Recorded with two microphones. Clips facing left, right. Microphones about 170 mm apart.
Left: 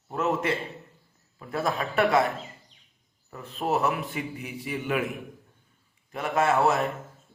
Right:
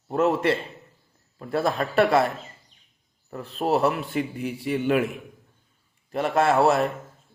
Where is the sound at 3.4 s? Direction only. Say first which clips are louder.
Right 4 dB; 30° right (ahead or behind).